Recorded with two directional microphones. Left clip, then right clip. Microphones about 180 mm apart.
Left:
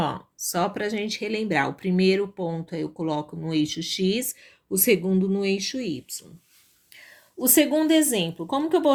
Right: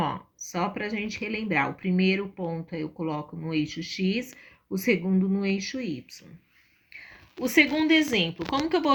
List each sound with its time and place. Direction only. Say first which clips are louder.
0.0 s speech: left 2 dB; 55° left (ahead or behind)
7.9 s speech: left 1 dB; 55° left (ahead or behind)